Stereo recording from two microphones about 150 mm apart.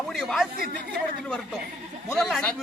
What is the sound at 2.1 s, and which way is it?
Speech, centre (ahead or behind).